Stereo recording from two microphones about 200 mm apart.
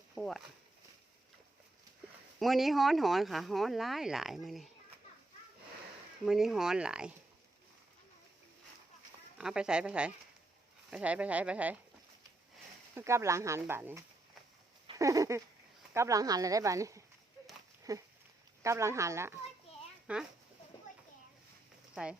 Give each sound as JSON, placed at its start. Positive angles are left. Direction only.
{"t": 0.1, "sound": "speech", "side_deg": 0}
{"t": 2.4, "sound": "speech", "side_deg": 0}
{"t": 6.2, "sound": "speech", "side_deg": 0}
{"t": 9.4, "sound": "speech", "side_deg": -5}
{"t": 12.9, "sound": "speech", "side_deg": -15}
{"t": 14.9, "sound": "a sound", "side_deg": -15}
{"t": 15.9, "sound": "speech", "side_deg": -15}
{"t": 22.0, "sound": "speech", "side_deg": -5}